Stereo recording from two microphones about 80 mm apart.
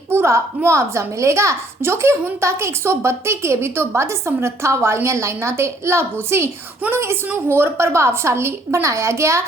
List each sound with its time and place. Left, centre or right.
0.1 s a woman's voice: right